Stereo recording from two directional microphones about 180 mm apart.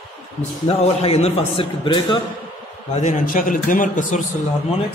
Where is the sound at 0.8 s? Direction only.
35° left (ahead or behind).